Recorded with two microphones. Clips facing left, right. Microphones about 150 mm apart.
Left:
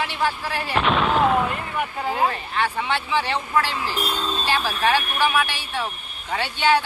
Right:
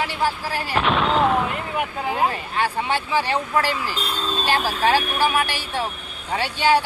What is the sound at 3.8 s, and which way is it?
Speech, 10° left (ahead or behind).